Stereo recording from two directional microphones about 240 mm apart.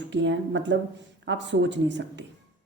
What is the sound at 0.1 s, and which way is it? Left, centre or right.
A woman's voice, right.